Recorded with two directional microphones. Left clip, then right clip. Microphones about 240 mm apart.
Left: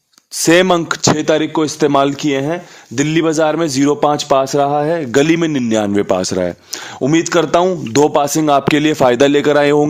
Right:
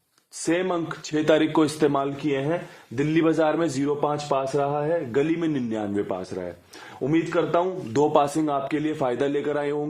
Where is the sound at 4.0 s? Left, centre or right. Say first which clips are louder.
Left 12 dB; left.